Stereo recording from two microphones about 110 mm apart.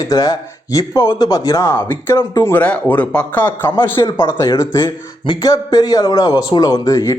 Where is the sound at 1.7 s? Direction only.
20° left (ahead or behind).